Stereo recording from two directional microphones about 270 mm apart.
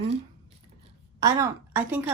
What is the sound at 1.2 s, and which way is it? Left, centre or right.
Speech, centre.